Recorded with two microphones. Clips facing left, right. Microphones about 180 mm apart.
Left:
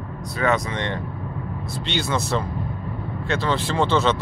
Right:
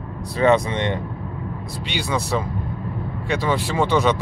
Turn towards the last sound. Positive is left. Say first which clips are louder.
# right 1 dB
turn(degrees=-15)  # may be behind; listen again after turning